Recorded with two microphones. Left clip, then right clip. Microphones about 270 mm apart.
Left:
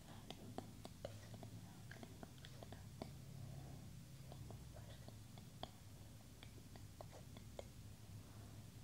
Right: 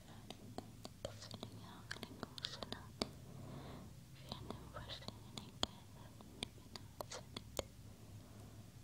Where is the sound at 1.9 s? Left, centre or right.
Right.